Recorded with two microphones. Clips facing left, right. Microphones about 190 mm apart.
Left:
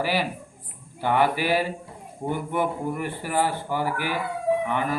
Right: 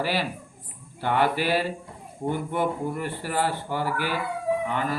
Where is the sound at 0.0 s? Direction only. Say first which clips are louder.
Left 1 dB; 10° left (ahead or behind).